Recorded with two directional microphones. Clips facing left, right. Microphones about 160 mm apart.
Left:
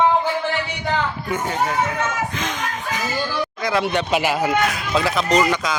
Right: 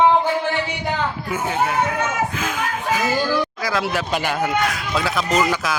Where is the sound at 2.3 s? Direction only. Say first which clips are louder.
Right 1 dB; 5° right (ahead or behind).